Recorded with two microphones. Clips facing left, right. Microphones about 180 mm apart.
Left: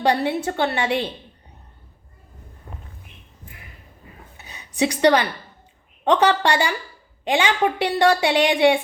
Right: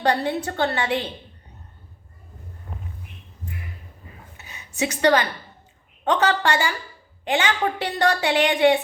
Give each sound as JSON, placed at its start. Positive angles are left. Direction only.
{"t": 0.0, "sound": "a woman's voice", "side_deg": 10}
{"t": 4.4, "sound": "a sound", "side_deg": 15}
{"t": 6.2, "sound": "a woman's voice", "side_deg": 15}